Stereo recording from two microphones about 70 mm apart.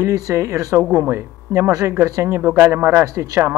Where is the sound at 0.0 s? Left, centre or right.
Right.